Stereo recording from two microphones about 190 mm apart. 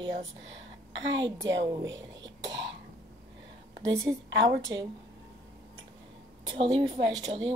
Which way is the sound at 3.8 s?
15° right (ahead or behind).